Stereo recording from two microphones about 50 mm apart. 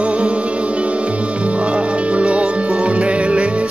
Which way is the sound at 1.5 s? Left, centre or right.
Right.